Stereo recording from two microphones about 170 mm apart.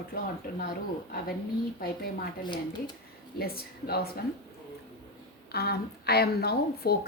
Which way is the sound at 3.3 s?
60° left (ahead or behind).